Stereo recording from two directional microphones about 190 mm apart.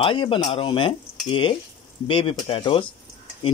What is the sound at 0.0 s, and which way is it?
Speech, 25° left (ahead or behind).